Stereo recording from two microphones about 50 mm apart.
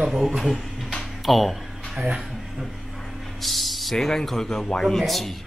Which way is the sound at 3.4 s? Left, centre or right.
Centre.